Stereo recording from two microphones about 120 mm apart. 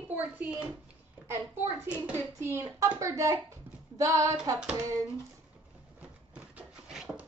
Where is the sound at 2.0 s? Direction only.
20° right (ahead or behind).